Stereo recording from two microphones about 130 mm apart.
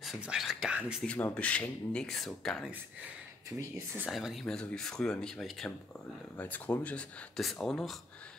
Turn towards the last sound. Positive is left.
turn(degrees=5)  # may be behind; listen again after turning